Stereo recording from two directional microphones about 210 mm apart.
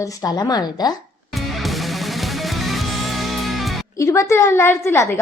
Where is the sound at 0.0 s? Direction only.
15° left (ahead or behind).